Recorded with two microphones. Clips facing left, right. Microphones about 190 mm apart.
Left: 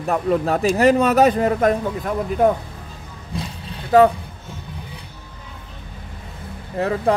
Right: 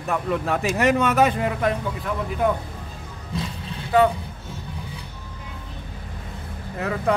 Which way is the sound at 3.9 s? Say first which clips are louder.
Left 5 dB; 40° left (ahead or behind).